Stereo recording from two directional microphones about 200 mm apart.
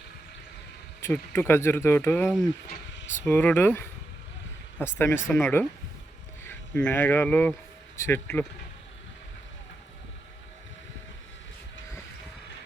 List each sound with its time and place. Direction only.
1.0 s speech: 10° left (ahead or behind)
2.6 s a sound: 60° left (ahead or behind)
3.2 s speech: 10° left (ahead or behind)